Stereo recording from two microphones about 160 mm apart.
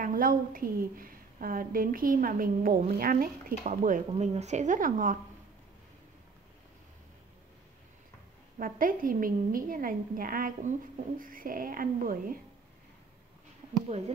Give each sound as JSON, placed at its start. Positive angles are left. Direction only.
{"t": 0.0, "sound": "a woman's voice", "side_deg": -60}
{"t": 4.1, "sound": "speech", "side_deg": -45}
{"t": 8.5, "sound": "a woman's voice", "side_deg": -60}
{"t": 13.8, "sound": "speech", "side_deg": -40}